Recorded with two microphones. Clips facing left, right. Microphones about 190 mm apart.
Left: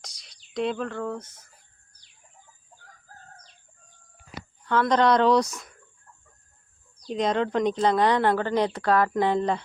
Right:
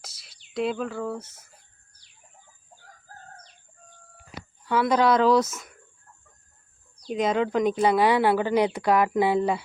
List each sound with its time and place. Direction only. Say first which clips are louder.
0.0 s a sound: even; 5° right (ahead or behind)
0.5 s speech: even; 5° right (ahead or behind)
4.6 s speech: even; 10° right (ahead or behind)
7.1 s speech: right 1 dB; 5° right (ahead or behind)